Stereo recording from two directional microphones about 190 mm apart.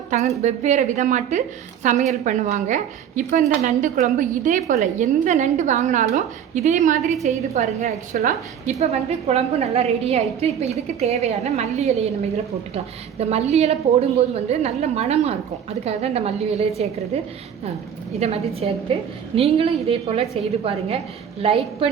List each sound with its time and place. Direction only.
0.1 s a woman's voice: 40° right (ahead or behind)
18.2 s a woman's voice: 35° right (ahead or behind)
21.4 s a woman's voice: 30° right (ahead or behind)